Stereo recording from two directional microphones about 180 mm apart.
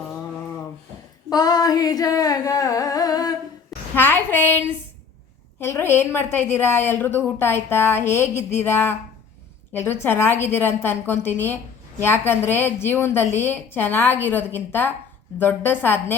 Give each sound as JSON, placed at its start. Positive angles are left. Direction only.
{"t": 1.3, "sound": "singing", "side_deg": 20}
{"t": 3.9, "sound": "a sound", "side_deg": 10}
{"t": 5.5, "sound": "a woman's voice", "side_deg": 15}